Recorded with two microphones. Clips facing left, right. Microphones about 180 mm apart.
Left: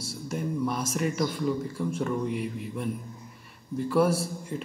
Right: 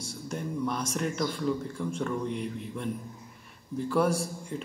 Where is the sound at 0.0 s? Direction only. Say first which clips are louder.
Left 3 dB; 5° left (ahead or behind).